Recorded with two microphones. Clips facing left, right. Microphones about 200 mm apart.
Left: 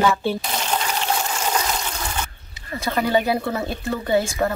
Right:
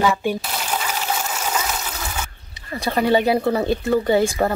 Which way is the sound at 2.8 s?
30° right (ahead or behind).